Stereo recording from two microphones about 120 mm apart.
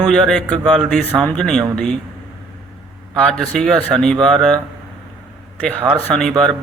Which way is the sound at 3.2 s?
5° left (ahead or behind).